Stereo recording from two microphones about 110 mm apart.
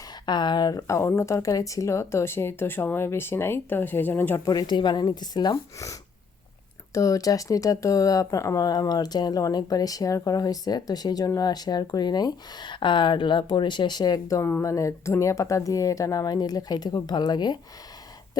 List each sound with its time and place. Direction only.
0.3 s speech: 40° left (ahead or behind); by 4.4 s 15° left (ahead or behind)
4.4 s speech: 35° left (ahead or behind)